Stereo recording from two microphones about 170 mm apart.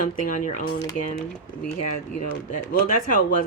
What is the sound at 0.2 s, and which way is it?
Speech, 50° left (ahead or behind).